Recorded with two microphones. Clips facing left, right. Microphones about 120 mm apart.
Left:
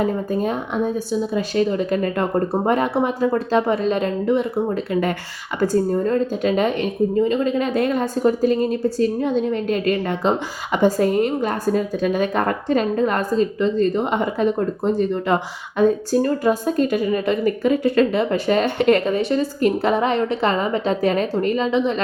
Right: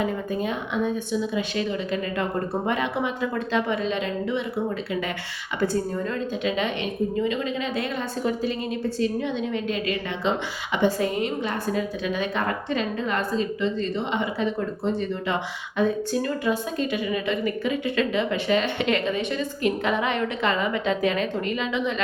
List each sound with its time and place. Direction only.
0.0 s a woman's voice: 40° left (ahead or behind)